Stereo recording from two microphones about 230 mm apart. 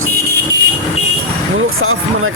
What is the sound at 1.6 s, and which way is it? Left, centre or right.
Speech, right.